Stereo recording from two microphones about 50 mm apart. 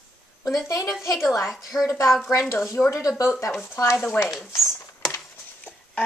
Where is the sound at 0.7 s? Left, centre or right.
Left.